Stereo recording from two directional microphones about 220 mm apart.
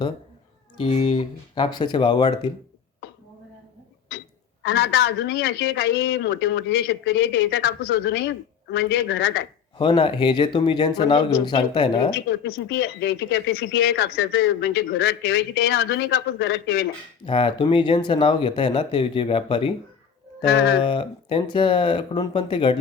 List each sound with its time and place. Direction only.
0.8 s speech: 25° left (ahead or behind)
4.6 s speech: 45° left (ahead or behind)
9.7 s speech: 20° left (ahead or behind)
12.5 s speech: 45° left (ahead or behind)
17.2 s speech: 20° left (ahead or behind)
20.5 s speech: 45° left (ahead or behind)
20.8 s speech: 20° left (ahead or behind)